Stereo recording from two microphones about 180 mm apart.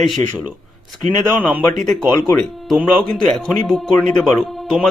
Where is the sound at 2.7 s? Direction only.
Centre (ahead or behind).